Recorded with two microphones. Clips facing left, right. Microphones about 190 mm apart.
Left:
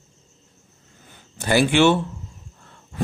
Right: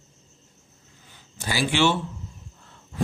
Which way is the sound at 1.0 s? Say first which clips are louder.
Left 8 dB; 55° left (ahead or behind).